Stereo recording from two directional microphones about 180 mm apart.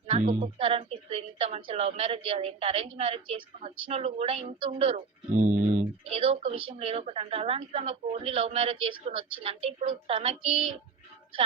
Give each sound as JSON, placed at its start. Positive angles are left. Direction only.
{"t": 0.1, "sound": "speech", "side_deg": -35}
{"t": 5.4, "sound": "speech", "side_deg": -45}